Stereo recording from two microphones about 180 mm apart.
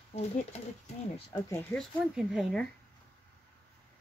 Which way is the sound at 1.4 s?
10° left (ahead or behind).